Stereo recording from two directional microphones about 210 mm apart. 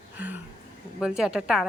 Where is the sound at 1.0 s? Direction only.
5° right (ahead or behind).